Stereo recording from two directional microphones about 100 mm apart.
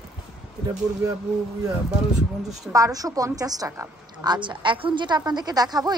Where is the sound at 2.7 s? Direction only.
35° right (ahead or behind).